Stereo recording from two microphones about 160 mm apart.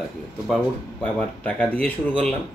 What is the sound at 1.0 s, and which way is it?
Speech, 10° left (ahead or behind).